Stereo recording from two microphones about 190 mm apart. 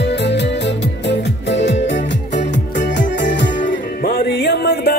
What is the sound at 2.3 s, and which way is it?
Music, 40° left (ahead or behind).